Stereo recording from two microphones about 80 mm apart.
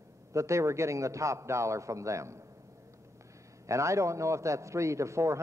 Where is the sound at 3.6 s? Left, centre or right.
Right.